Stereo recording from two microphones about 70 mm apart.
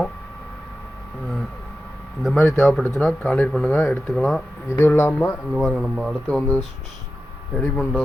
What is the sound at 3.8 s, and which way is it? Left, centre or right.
Speech, centre.